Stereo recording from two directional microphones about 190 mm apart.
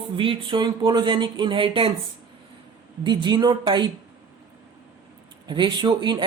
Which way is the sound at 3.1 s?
25° right (ahead or behind).